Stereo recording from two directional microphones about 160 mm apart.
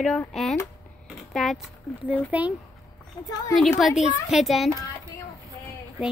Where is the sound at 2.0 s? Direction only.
10° right (ahead or behind).